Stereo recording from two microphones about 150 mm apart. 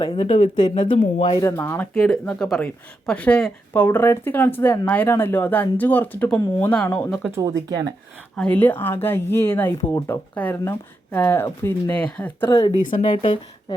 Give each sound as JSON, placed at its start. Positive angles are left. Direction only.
{"t": 0.0, "sound": "speech", "side_deg": 30}
{"t": 1.4, "sound": "speech", "side_deg": 20}
{"t": 8.4, "sound": "speech", "side_deg": 10}
{"t": 12.5, "sound": "speech", "side_deg": 25}
{"t": 13.0, "sound": "speech", "side_deg": 35}